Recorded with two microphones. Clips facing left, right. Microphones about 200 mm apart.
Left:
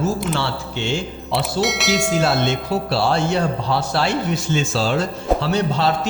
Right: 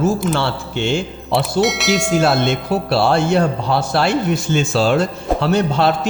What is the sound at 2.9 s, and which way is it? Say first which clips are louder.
A man's voice: right 5 dB; 60° right (ahead or behind).